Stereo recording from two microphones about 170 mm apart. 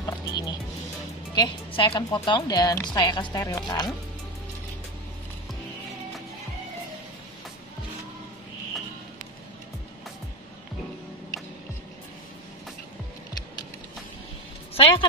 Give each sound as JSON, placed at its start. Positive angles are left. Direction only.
{"t": 0.0, "sound": "music", "side_deg": 25}
{"t": 1.3, "sound": "speech", "side_deg": 25}
{"t": 14.7, "sound": "a sound", "side_deg": 30}